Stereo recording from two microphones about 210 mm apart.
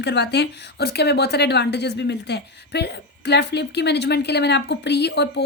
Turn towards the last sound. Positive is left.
turn(degrees=50)  # may be behind; listen again after turning